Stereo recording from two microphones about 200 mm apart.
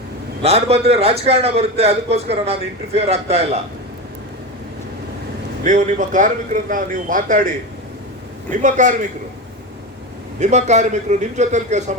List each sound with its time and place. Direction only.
0.4 s a man's voice: 30° right (ahead or behind)
5.6 s a man's voice: 40° right (ahead or behind)
10.4 s a man's voice: 35° right (ahead or behind)